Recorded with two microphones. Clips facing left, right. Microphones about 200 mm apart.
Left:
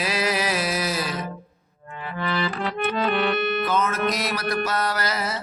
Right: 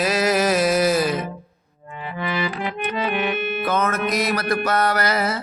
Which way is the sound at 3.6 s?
55° right (ahead or behind).